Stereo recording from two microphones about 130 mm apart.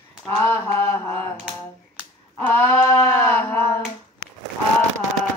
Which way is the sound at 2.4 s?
20° left (ahead or behind).